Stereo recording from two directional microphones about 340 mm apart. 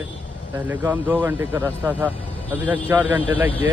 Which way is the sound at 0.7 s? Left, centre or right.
Centre.